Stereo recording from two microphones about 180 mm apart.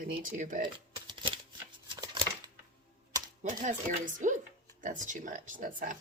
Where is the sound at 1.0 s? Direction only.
25° right (ahead or behind).